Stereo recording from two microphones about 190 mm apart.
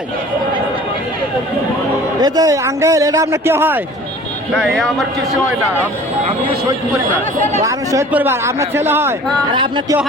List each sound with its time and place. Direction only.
2.2 s a man's voice: 20° right (ahead or behind)
4.5 s speech: centre (ahead or behind)
7.6 s a man's voice: 15° right (ahead or behind)
9.5 s speech: 25° right (ahead or behind)